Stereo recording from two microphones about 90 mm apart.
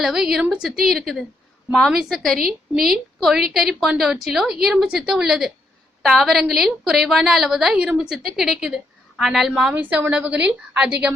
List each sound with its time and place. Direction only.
0.0 s a woman's voice: 5° right (ahead or behind)
9.7 s a woman's voice: 15° right (ahead or behind)